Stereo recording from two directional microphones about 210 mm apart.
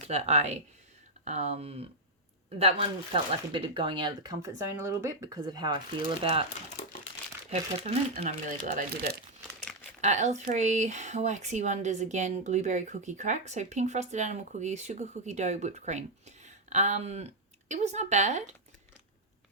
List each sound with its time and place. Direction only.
0.1 s speech: 30° right (ahead or behind)
7.5 s speech: 30° right (ahead or behind)